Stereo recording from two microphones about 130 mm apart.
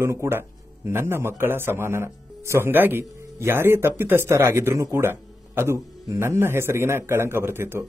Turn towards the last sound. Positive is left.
turn(degrees=-20)  # may be behind; listen again after turning